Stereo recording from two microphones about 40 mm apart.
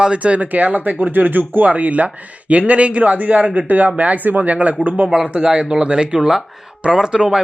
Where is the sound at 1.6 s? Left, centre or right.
Right.